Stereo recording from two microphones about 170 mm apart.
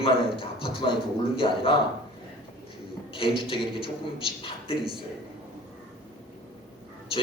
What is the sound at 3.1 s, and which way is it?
A man's voice, 30° left (ahead or behind).